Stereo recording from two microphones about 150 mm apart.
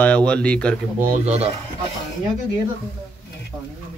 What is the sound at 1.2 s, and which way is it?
Speech, 45° right (ahead or behind).